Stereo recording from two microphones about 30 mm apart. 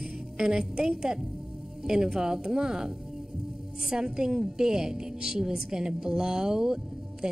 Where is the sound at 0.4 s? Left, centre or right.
Right.